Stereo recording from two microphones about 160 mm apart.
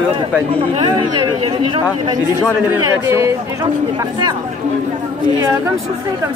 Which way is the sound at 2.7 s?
15° right (ahead or behind).